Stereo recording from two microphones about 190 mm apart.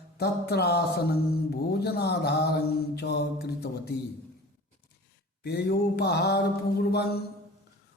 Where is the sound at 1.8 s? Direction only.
60° left (ahead or behind).